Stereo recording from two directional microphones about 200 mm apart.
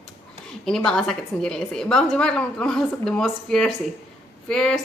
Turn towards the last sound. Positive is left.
turn(degrees=0)  # may be behind; listen again after turning